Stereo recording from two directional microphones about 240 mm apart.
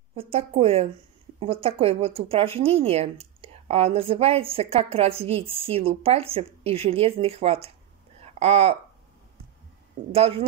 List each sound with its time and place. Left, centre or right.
0.1 s speech: right
8.2 s a sound: right
10.1 s speech: right